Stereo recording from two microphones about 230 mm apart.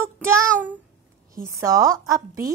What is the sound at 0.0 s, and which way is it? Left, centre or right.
Child singing, centre.